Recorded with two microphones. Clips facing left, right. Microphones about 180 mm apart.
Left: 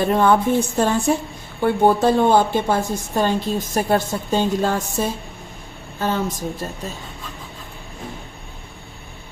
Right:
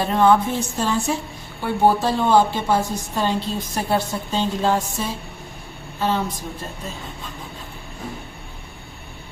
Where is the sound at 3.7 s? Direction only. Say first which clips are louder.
Left 3 dB; 50° left (ahead or behind).